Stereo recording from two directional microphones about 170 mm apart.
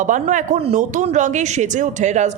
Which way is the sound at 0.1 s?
45° right (ahead or behind).